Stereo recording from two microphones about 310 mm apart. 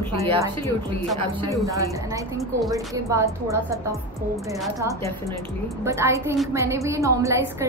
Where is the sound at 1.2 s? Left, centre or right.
Centre.